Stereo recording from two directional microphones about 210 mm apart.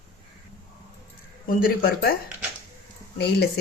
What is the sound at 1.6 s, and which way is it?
Speech, 45° left (ahead or behind).